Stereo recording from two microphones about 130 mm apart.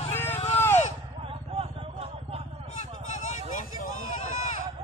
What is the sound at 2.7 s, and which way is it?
Vehicle, 65° left (ahead or behind).